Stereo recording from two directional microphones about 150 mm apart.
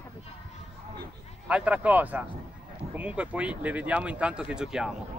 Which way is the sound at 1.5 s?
10° right (ahead or behind).